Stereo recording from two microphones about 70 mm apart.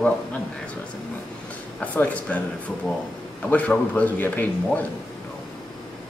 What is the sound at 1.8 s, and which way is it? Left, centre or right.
Speech, left.